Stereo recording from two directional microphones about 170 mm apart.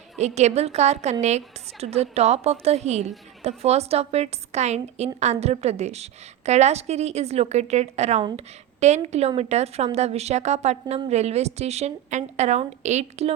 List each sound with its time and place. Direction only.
0.2 s a woman's voice: 40° right (ahead or behind)